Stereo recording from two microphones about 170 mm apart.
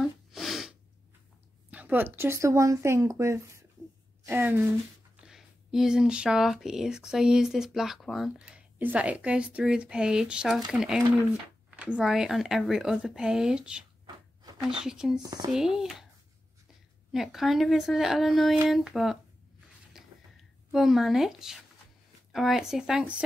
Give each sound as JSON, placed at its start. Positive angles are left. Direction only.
{"t": 0.0, "sound": "sneeze", "side_deg": 0}
{"t": 1.7, "sound": "a woman's voice", "side_deg": -10}
{"t": 15.2, "sound": "speech", "side_deg": -25}
{"t": 15.5, "sound": "speech", "side_deg": -5}
{"t": 17.1, "sound": "speech", "side_deg": 0}
{"t": 19.9, "sound": "a sound", "side_deg": 0}
{"t": 22.3, "sound": "speech", "side_deg": 0}